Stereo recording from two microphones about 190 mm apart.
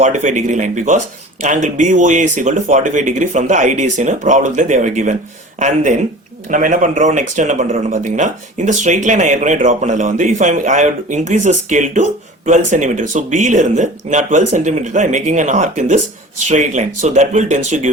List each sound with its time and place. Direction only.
0.0 s speech: 40° right (ahead or behind)